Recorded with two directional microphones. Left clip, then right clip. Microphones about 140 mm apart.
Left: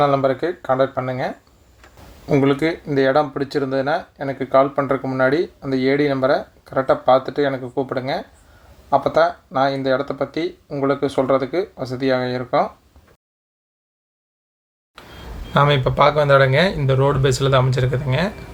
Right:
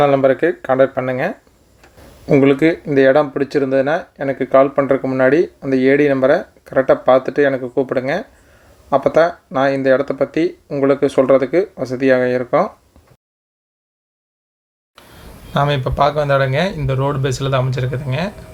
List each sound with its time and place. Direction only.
0.0 s speech: 25° right (ahead or behind)
15.0 s a sound: 10° right (ahead or behind)
15.5 s speech: 10° right (ahead or behind)